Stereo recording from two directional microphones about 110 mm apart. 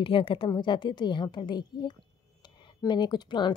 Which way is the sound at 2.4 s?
45° left (ahead or behind).